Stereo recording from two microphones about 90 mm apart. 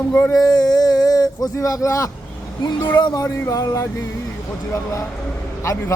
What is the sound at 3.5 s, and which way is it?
Speech, 40° left (ahead or behind).